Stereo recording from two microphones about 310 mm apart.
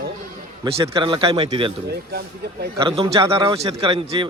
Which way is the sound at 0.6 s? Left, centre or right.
Centre.